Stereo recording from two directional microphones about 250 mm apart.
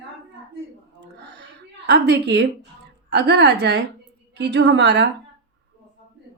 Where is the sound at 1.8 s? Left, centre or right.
Right.